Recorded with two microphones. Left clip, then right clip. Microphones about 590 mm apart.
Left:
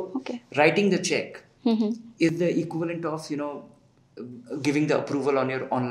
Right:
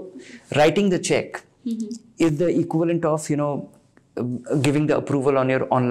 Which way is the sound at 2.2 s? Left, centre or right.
Right.